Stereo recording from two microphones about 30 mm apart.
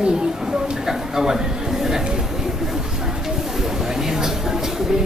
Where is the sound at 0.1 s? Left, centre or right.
Centre.